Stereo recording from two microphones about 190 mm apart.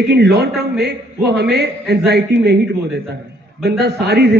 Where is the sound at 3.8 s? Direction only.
60° right (ahead or behind).